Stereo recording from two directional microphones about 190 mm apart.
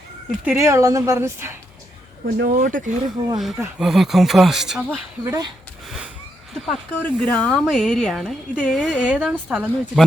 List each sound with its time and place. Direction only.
0.4 s a woman's voice: 15° right (ahead or behind)
2.2 s speech: 50° right (ahead or behind)
3.3 s a woman's voice: 5° right (ahead or behind)
5.2 s speech: 20° right (ahead or behind)
6.7 s a woman's voice: 5° left (ahead or behind)